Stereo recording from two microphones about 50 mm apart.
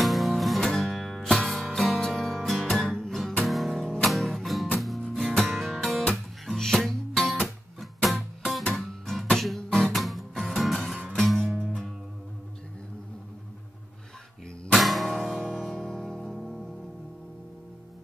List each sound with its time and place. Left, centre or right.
0.0 s music: centre
3.1 s guitar: centre
3.4 s music: centre
3.8 s music: centre
4.1 s music: centre
14.7 s music: centre